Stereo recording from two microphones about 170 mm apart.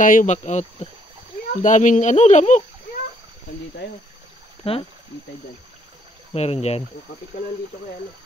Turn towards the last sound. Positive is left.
turn(degrees=40)  # may be behind; listen again after turning